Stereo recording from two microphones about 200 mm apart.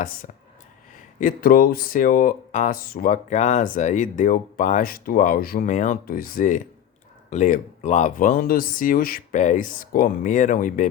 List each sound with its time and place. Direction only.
1.2 s speech: 45° left (ahead or behind)